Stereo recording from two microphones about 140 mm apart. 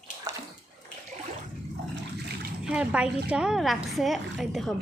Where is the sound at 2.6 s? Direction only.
10° right (ahead or behind).